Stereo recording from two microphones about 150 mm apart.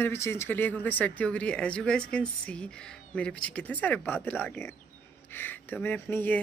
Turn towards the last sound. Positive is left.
turn(degrees=10)  # may be behind; listen again after turning